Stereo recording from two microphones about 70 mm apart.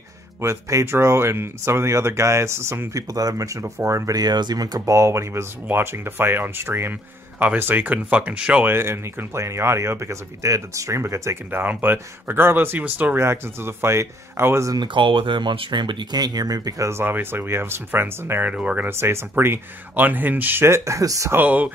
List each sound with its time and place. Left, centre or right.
0.4 s speech: right
4.2 s speech: right
4.9 s speech: right; by 8.6 s centre
8.6 s speech: right
11.8 s speech: right
13.2 s speech: right
15.4 s speech: right
17.0 s speech: right
18.4 s speech: centre
18.9 s speech: right
21.3 s speech: right